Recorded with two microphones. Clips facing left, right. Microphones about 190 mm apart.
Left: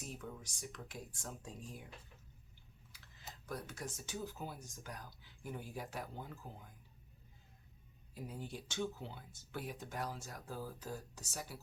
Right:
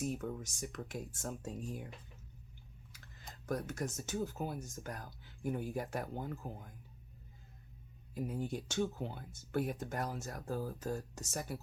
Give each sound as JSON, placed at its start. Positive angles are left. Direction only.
{"t": 0.0, "sound": "speech", "side_deg": -50}
{"t": 3.4, "sound": "speech", "side_deg": -45}
{"t": 8.1, "sound": "speech", "side_deg": -50}